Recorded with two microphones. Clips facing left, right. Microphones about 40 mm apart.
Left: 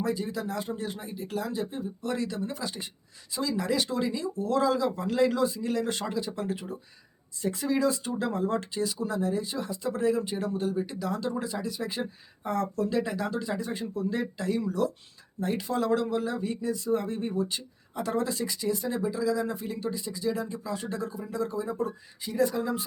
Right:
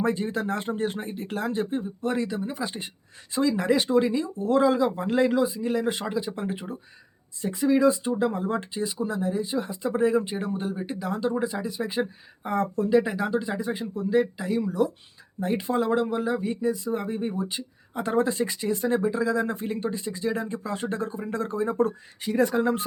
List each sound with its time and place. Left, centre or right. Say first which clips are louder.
0.0 s speech: right 4 dB; right
5.3 s speech: right 3 dB; centre
17.9 s speech: right 5 dB; right